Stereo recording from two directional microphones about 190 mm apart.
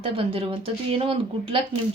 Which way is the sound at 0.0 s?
30° right (ahead or behind).